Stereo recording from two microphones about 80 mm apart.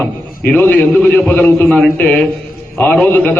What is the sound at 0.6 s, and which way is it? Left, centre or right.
A man's voice, centre.